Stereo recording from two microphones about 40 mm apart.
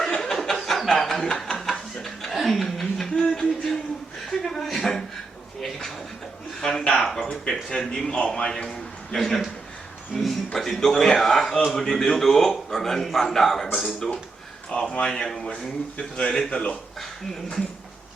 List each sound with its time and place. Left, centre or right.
0.0 s chuckle: centre
2.3 s chuckle: centre
3.2 s music: centre
4.3 s chuckle: centre
6.6 s a sound: centre
7.9 s a man's voice: centre
10.2 s a sound: centre
10.8 s a man's voice: centre
14.8 s speech: left
15.2 s a man's voice: centre
16.5 s speech: left